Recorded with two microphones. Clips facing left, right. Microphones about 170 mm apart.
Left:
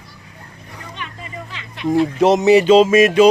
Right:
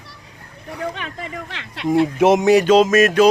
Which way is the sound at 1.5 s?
70° right (ahead or behind).